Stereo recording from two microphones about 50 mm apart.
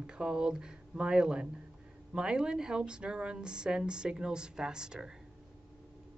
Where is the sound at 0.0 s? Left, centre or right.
Centre.